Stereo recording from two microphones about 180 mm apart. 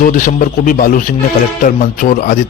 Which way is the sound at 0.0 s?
50° left (ahead or behind).